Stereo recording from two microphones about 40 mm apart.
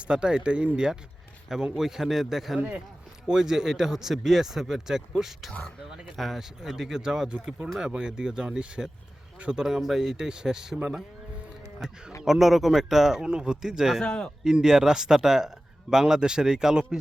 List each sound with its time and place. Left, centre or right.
0.0 s speech: right
1.7 s speech: centre
9.8 s speech: centre
10.2 s speech: centre
11.8 s speech: centre
14.0 s speech: left
14.4 s speech: centre